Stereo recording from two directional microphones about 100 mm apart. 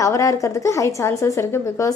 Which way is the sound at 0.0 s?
35° left (ahead or behind).